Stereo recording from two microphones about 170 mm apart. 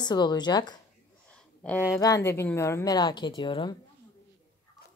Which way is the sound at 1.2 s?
5° left (ahead or behind).